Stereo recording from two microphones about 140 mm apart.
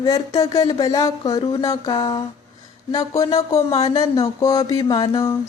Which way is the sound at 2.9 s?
25° left (ahead or behind).